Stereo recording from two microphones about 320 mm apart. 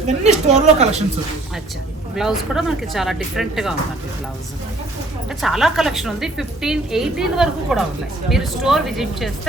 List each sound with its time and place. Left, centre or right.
0.2 s a woman's voice: right
2.1 s a woman's voice: centre
5.4 s a woman's voice: centre